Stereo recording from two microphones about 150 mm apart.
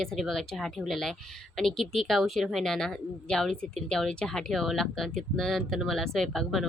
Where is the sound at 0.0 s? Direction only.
Centre (ahead or behind).